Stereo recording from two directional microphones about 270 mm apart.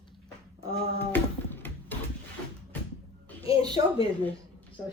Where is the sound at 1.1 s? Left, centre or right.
Centre.